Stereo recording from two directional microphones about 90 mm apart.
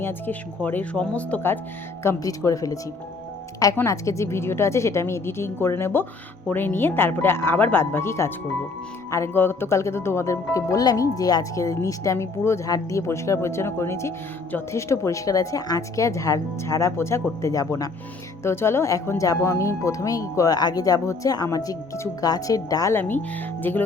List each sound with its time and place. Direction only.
0.0 s a woman's voice: 20° left (ahead or behind)
2.0 s speech: 35° left (ahead or behind)
3.8 s a woman's voice: 35° left (ahead or behind)
18.4 s speech: 30° left (ahead or behind)
23.0 s a woman's voice: 20° left (ahead or behind)